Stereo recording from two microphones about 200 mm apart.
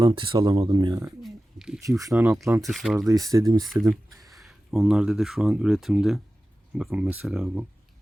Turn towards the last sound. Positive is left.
turn(degrees=0)  # may be behind; listen again after turning